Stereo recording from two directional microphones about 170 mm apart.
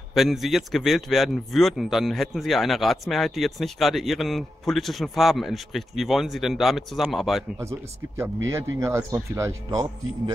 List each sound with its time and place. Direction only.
0.1 s a man's voice: centre (ahead or behind)
8.5 s speech: 15° right (ahead or behind)